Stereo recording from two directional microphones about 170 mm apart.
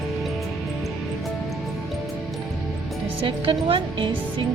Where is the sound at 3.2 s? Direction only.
30° right (ahead or behind).